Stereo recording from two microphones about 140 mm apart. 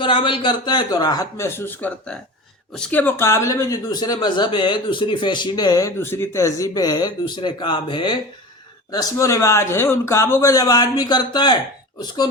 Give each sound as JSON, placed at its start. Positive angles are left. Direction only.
{"t": 0.0, "sound": "speech", "side_deg": 35}